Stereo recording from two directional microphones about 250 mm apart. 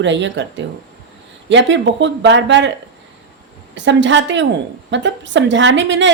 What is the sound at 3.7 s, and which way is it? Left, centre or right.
A woman's voice, right.